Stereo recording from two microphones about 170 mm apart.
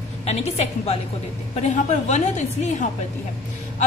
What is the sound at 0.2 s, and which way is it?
A woman's voice, 40° left (ahead or behind).